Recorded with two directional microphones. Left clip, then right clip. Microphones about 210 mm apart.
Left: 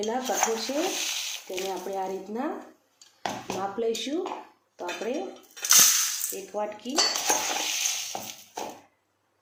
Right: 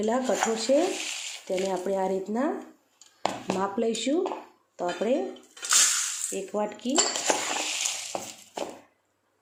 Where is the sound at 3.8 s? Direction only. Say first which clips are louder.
Left 1 dB; 40° right (ahead or behind).